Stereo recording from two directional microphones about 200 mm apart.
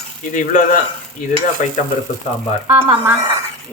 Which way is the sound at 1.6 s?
40° left (ahead or behind).